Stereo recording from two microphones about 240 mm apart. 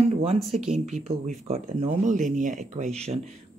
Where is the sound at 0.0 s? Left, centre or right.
Right.